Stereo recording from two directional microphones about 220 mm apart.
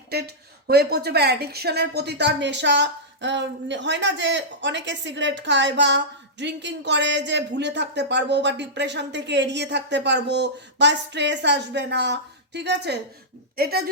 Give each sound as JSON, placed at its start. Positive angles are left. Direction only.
{"t": 0.1, "sound": "speech", "side_deg": -45}